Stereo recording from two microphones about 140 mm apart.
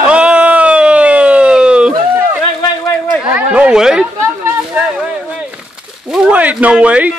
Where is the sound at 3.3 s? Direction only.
10° right (ahead or behind).